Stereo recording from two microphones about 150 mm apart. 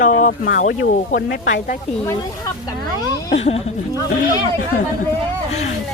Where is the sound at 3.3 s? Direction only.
45° left (ahead or behind).